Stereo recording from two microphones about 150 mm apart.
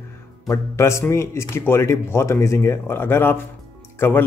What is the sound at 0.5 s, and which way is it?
Speech, 20° left (ahead or behind).